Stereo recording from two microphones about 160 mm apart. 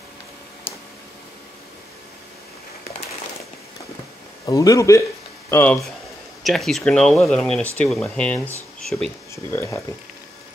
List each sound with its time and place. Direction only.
4.5 s speech: 20° left (ahead or behind)
6.4 s speech: centre (ahead or behind)
9.3 s speech: 15° left (ahead or behind)